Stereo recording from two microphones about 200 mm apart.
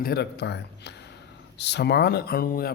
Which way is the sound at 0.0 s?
55° left (ahead or behind).